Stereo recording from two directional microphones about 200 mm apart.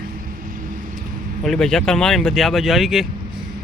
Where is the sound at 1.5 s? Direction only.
5° left (ahead or behind).